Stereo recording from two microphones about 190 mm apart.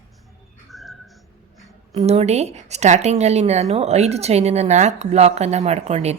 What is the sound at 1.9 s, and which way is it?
A woman's voice, 35° right (ahead or behind).